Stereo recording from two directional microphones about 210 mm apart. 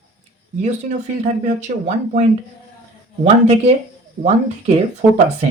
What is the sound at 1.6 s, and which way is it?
Speech, 35° right (ahead or behind).